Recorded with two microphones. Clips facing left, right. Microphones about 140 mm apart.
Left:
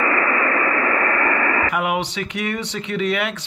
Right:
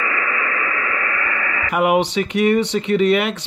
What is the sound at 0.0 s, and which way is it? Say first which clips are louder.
Radio: left 4 dB; 40° left (ahead or behind).